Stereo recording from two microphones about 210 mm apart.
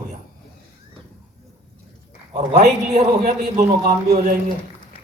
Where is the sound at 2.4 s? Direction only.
40° right (ahead or behind).